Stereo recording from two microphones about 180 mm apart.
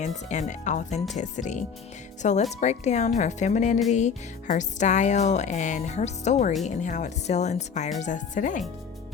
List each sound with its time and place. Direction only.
0.0 s speech: 40° left (ahead or behind)